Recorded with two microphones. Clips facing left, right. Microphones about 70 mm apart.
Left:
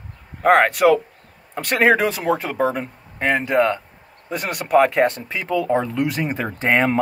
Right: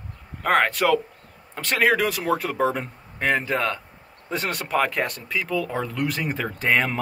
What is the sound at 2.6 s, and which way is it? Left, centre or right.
Speech, centre.